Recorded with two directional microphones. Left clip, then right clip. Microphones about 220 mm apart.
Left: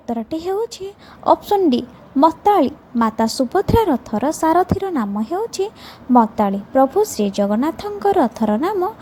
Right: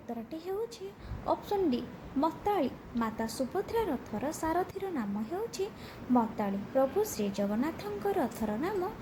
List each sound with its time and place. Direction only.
0.1 s a woman's voice: 40° left (ahead or behind)